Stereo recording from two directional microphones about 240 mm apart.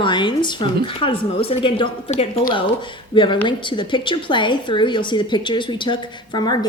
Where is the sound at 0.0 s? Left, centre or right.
Centre.